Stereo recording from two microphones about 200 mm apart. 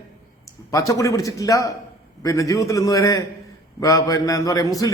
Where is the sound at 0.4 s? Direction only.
15° left (ahead or behind).